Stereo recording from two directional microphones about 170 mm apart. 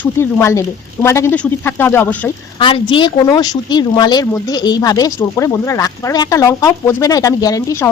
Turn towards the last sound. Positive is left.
turn(degrees=15)  # may be behind; listen again after turning